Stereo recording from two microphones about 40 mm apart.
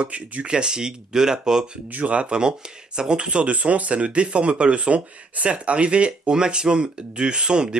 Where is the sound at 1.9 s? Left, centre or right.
Right.